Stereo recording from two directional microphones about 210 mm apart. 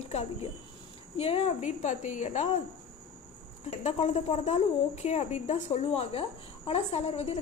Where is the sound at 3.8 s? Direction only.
30° left (ahead or behind).